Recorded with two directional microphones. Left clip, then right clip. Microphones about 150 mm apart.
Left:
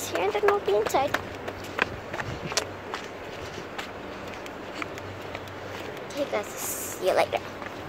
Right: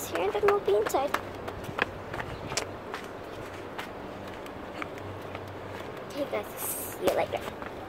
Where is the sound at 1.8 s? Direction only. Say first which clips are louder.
Left 3 dB; 75° left (ahead or behind).